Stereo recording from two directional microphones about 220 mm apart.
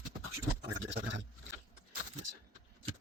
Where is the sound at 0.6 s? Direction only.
55° right (ahead or behind).